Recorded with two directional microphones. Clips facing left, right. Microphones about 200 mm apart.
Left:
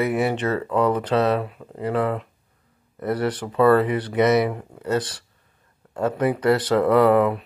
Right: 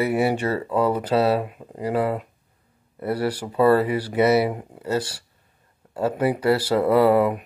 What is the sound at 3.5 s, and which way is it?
Speech, 30° right (ahead or behind).